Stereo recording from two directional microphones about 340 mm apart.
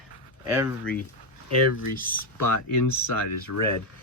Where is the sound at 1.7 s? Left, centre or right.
Left.